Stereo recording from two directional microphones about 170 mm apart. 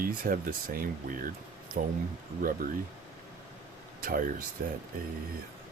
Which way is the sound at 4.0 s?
55° right (ahead or behind).